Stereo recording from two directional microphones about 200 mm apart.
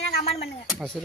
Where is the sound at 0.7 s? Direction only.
Centre (ahead or behind).